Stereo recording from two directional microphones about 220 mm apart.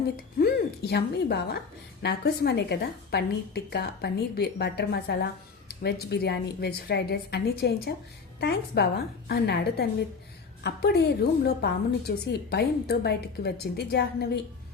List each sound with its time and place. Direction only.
0.3 s a woman's voice: 45° left (ahead or behind)